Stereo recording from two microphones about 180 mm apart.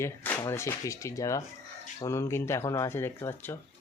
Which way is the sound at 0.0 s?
15° left (ahead or behind).